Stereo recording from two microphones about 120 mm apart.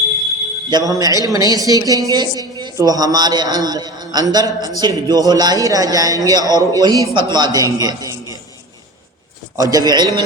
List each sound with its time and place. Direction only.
0.7 s speech: 30° right (ahead or behind)
9.6 s speech: 30° right (ahead or behind)